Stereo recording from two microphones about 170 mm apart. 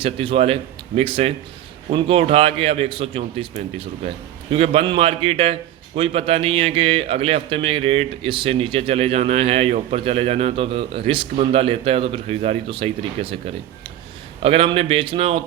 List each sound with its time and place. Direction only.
0.0 s a man's voice: 30° right (ahead or behind)
4.5 s a man's voice: 35° right (ahead or behind)